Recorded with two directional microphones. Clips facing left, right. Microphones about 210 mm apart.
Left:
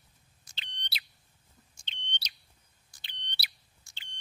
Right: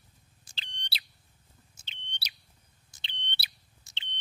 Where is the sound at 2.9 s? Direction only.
25° right (ahead or behind).